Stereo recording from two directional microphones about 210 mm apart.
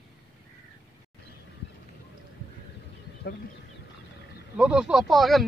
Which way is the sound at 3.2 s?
55° left (ahead or behind).